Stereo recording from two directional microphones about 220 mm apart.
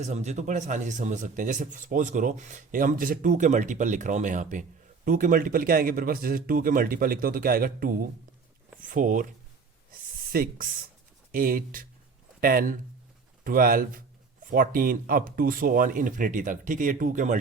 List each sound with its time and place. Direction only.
0.0 s speech: 30° right (ahead or behind)
9.9 s a sound: 40° right (ahead or behind)
11.3 s speech: 40° right (ahead or behind)